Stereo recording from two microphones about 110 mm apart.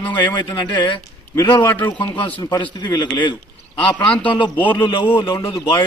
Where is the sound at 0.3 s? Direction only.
40° left (ahead or behind).